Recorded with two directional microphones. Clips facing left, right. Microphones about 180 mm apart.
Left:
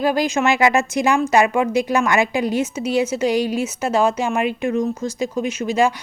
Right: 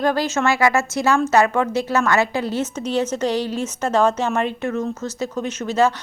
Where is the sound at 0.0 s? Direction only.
15° left (ahead or behind).